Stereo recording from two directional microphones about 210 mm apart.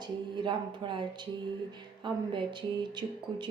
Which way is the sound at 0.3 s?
20° right (ahead or behind).